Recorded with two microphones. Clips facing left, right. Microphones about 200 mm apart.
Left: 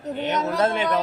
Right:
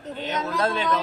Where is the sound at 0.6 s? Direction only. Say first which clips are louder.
Left 3 dB; 20° left (ahead or behind).